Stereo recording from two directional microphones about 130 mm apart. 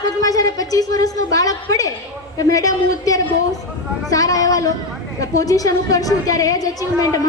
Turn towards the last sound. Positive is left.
turn(degrees=25)  # may be behind; listen again after turning